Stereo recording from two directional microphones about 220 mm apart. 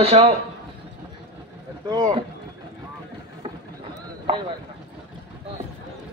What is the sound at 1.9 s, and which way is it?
Speech, 15° right (ahead or behind).